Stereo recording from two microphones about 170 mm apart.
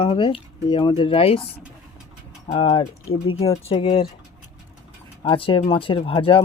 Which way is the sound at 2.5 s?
30° left (ahead or behind).